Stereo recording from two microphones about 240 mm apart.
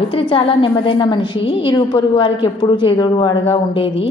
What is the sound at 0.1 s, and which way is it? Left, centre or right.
A woman's voice, left.